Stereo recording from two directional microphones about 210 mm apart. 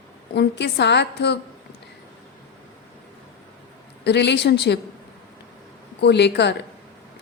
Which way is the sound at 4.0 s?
55° left (ahead or behind).